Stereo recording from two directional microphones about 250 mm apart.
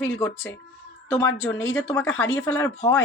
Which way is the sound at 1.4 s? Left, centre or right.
Left.